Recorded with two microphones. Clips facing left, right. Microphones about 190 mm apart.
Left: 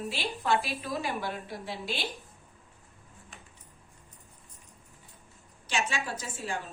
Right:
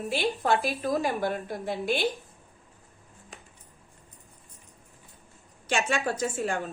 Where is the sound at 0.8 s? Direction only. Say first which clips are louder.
Right 7 dB; 50° right (ahead or behind).